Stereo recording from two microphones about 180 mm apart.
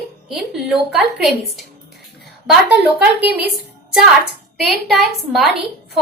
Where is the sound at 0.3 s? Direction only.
Centre (ahead or behind).